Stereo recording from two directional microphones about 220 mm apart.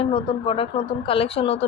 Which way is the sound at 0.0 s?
25° left (ahead or behind).